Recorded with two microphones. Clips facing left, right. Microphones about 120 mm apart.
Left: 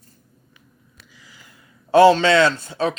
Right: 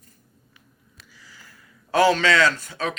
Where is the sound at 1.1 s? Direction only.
15° left (ahead or behind).